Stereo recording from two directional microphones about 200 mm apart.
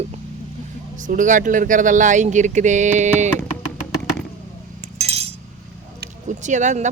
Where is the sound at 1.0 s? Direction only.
40° right (ahead or behind).